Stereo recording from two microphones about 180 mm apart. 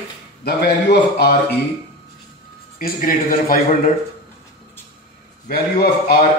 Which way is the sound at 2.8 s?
50° left (ahead or behind).